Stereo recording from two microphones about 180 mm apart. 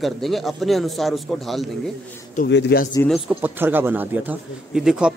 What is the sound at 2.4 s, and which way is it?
Speech, 65° left (ahead or behind).